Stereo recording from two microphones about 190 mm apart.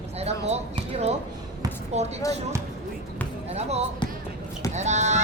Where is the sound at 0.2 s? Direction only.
35° right (ahead or behind).